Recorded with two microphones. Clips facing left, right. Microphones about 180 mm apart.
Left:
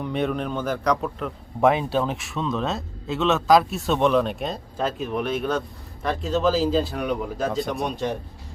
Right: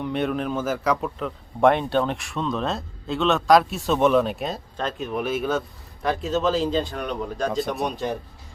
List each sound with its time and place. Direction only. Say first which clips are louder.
0.0 s a man's voice: even; centre (ahead or behind)